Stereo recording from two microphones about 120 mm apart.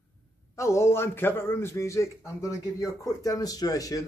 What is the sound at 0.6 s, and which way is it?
A man's voice, 25° left (ahead or behind).